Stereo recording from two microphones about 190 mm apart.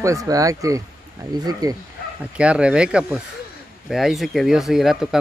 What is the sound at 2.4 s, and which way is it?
Speech, 5° right (ahead or behind).